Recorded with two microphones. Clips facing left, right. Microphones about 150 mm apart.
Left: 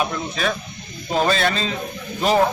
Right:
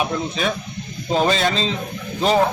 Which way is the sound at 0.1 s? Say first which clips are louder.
Right 2 dB; 15° right (ahead or behind).